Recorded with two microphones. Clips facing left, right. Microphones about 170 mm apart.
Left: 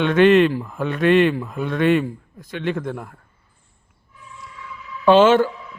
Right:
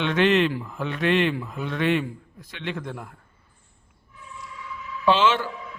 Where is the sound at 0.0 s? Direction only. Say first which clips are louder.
Left 7 dB; 50° left (ahead or behind).